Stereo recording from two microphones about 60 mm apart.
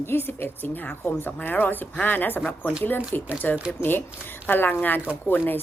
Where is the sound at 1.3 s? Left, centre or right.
Left.